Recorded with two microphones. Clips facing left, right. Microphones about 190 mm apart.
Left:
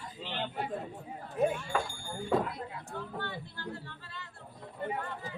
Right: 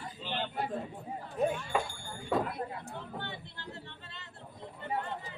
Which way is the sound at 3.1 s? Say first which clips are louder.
Left 2 dB; 20° right (ahead or behind).